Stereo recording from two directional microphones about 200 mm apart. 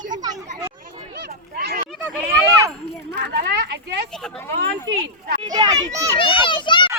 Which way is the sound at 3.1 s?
55° right (ahead or behind).